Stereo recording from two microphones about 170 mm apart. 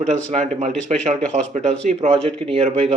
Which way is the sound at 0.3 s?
45° right (ahead or behind).